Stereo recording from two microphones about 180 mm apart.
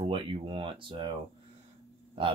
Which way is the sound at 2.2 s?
30° right (ahead or behind).